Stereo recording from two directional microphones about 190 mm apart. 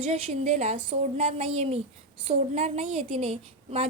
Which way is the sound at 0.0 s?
35° right (ahead or behind).